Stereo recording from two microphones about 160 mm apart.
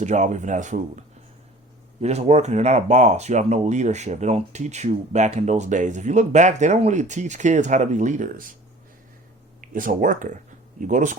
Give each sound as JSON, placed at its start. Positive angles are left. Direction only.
{"t": 0.0, "sound": "speech", "side_deg": -50}
{"t": 9.6, "sound": "speech", "side_deg": -55}